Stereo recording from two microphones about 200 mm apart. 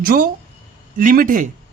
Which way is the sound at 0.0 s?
45° right (ahead or behind).